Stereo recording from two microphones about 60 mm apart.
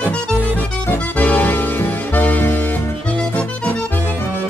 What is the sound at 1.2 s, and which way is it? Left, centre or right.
Music, left.